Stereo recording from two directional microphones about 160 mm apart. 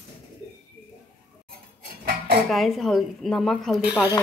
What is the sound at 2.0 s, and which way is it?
Dishes, 65° right (ahead or behind).